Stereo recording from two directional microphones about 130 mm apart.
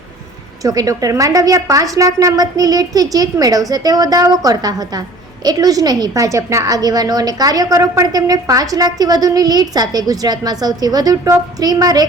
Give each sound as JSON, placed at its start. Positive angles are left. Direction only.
{"t": 0.6, "sound": "a woman's voice", "side_deg": -25}